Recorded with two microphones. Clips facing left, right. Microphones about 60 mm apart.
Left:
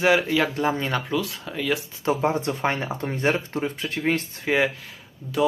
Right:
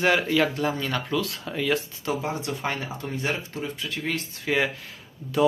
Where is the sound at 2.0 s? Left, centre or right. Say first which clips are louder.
Left 5 dB; left.